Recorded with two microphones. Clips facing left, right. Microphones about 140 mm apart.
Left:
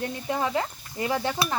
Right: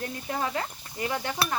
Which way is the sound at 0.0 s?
25° left (ahead or behind).